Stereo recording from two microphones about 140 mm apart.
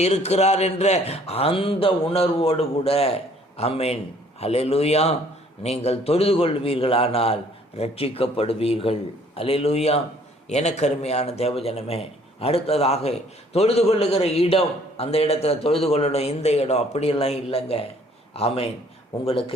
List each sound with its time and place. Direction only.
0.0 s a man's voice: 50° left (ahead or behind)